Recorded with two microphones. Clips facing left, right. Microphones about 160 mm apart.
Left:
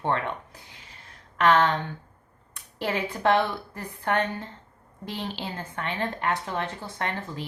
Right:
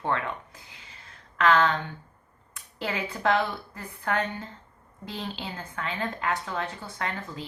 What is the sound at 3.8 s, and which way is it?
A woman's voice, 30° left (ahead or behind).